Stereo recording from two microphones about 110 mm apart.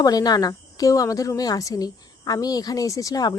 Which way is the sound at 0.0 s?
35° left (ahead or behind).